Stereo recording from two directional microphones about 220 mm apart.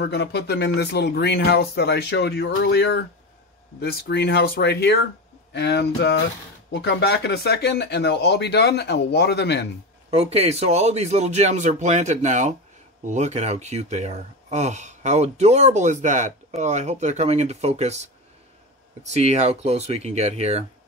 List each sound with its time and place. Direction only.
0.0 s speech: 50° left (ahead or behind)
10.1 s speech: 30° right (ahead or behind)
19.0 s speech: 30° right (ahead or behind)